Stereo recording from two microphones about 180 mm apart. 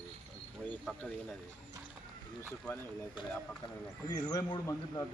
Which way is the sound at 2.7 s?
10° left (ahead or behind).